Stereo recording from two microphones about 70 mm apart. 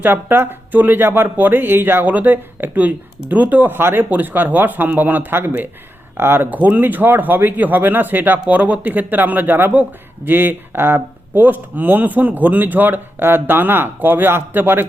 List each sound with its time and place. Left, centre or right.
0.0 s speech: right